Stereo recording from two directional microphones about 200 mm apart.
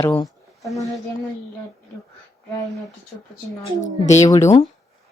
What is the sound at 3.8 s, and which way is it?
Speech, 35° left (ahead or behind).